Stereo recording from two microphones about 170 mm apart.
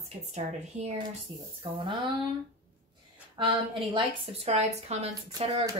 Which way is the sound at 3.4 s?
30° right (ahead or behind).